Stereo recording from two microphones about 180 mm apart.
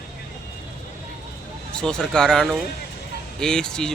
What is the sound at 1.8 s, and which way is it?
Speech, 5° left (ahead or behind).